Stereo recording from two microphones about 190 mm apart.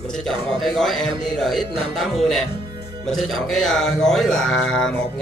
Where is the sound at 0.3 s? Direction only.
Centre (ahead or behind).